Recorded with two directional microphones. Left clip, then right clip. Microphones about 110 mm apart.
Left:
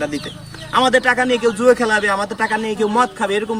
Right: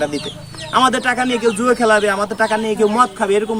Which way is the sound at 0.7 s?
30° right (ahead or behind).